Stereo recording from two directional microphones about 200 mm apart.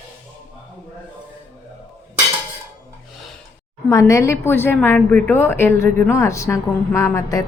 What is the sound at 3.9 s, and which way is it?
A woman's voice, 15° left (ahead or behind).